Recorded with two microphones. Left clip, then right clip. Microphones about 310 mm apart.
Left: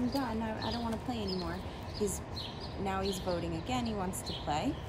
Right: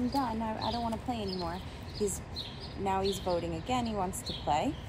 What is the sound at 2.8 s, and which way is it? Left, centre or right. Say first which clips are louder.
A woman's voice: right 4 dB; centre.